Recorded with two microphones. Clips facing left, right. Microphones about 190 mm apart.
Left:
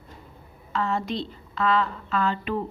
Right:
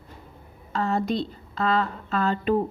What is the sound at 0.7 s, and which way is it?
A woman's voice, 40° right (ahead or behind).